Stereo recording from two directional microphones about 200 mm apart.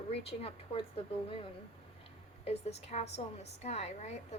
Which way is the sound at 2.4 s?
30° left (ahead or behind).